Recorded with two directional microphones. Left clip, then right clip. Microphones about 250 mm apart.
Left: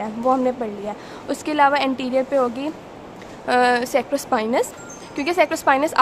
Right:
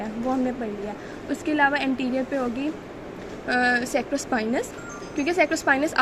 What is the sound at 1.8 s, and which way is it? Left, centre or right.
Speech, left.